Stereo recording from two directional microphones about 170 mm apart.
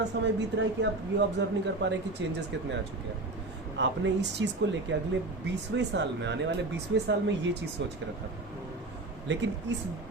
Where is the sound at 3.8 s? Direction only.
90° right.